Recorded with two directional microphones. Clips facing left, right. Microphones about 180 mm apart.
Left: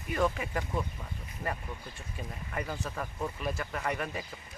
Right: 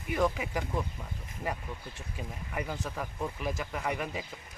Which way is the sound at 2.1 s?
10° right (ahead or behind).